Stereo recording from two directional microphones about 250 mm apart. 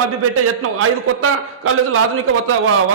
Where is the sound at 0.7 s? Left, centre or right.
Right.